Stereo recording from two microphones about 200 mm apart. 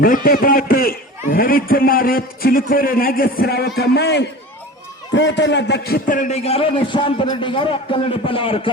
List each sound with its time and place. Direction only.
0.0 s a man's voice: 45° left (ahead or behind); by 8.7 s 25° left (ahead or behind)